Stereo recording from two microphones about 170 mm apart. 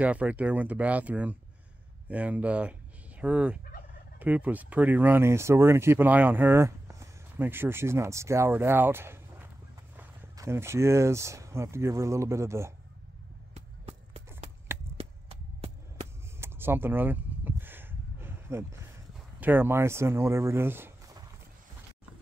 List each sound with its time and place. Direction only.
0.0 s speech: 10° right (ahead or behind)
3.2 s fowl: 5° right (ahead or behind)
4.2 s speech: 10° right (ahead or behind)
13.8 s run: 35° right (ahead or behind)
15.0 s a sound: 35° right (ahead or behind)
16.3 s a sound: 15° right (ahead or behind)
19.4 s speech: 10° right (ahead or behind)